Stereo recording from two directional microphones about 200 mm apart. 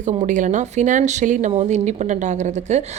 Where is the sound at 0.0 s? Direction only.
35° right (ahead or behind).